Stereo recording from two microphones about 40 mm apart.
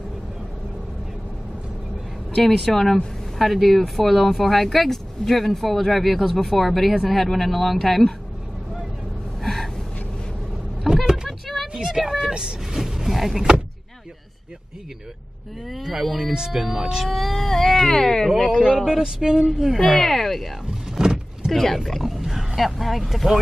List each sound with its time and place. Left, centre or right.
2.3 s speech: centre
9.4 s gasp: centre
10.9 s vehicle: centre
11.2 s a sound: centre
11.8 s vehicle: centre
12.8 s a sound: centre
15.7 s speech: centre
17.0 s speech: centre
18.8 s speech: centre
19.8 s speech: centre
20.9 s vehicle: centre
21.5 s speech: centre
21.7 s roaring cats: centre
22.6 s speech: centre